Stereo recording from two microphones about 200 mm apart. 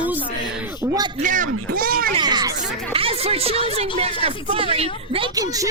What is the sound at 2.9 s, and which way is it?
Speech, 30° right (ahead or behind).